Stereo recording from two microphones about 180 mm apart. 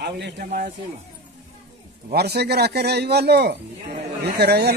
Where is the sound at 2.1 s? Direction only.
65° right (ahead or behind).